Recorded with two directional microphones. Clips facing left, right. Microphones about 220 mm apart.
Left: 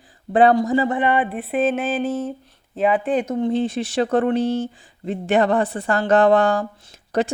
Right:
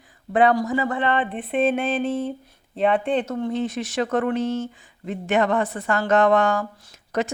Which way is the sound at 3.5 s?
30° left (ahead or behind).